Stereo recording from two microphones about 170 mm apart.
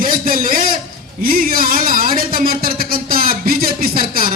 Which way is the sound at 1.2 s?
55° right (ahead or behind).